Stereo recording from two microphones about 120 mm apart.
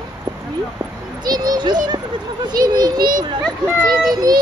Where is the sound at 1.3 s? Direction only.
35° right (ahead or behind).